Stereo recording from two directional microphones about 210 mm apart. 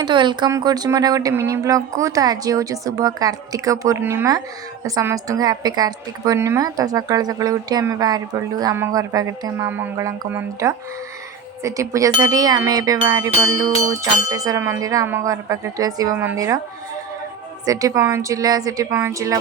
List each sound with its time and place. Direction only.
0.0 s speech: 20° right (ahead or behind)
17.7 s speech: 15° right (ahead or behind)